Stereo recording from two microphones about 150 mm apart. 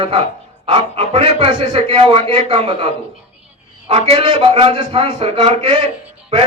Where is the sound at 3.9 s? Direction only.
40° right (ahead or behind).